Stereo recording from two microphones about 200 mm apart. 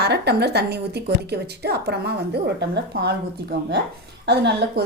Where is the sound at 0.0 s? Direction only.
55° right (ahead or behind).